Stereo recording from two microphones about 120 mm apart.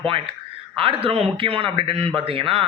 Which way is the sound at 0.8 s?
50° right (ahead or behind).